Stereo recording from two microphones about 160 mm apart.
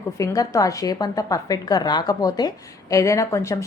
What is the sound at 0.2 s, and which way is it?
A woman's voice, 20° left (ahead or behind).